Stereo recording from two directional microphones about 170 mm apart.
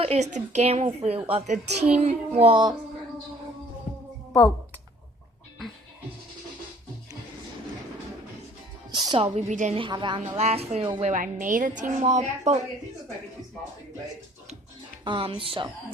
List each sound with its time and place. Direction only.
0.0 s a woman's voice: 40° right (ahead or behind)
3.9 s music: 50° left (ahead or behind)
4.3 s speech: 10° left (ahead or behind)
8.9 s a woman's voice: 25° right (ahead or behind); by 9.7 s 45° right (ahead or behind)
9.7 s a woman's voice: 30° right (ahead or behind)
10.2 s a woman's voice: 40° right (ahead or behind)
11.1 s a woman's voice: 50° right (ahead or behind)
15.0 s a woman's voice: 30° right (ahead or behind)